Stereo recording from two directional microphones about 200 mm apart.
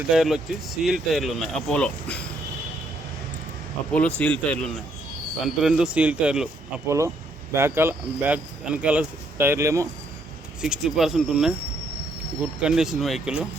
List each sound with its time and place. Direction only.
0.1 s speech: centre (ahead or behind)
3.9 s speech: 5° left (ahead or behind)
5.6 s speech: 5° right (ahead or behind)
10.6 s speech: 5° right (ahead or behind)
12.5 s speech: 5° right (ahead or behind)